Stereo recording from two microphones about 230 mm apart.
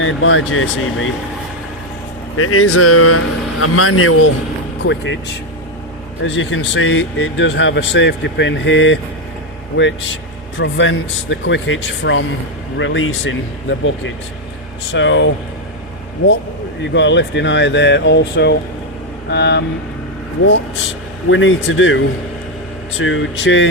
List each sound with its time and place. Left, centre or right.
0.0 s speech: left
2.3 s a man's voice: left
4.8 s speech: left
6.2 s speech: left
16.9 s speech: left
21.2 s speech: left